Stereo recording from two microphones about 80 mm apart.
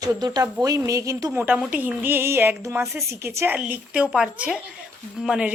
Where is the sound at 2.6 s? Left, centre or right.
Right.